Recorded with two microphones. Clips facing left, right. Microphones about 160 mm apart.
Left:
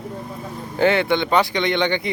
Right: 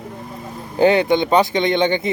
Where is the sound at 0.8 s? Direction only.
20° right (ahead or behind).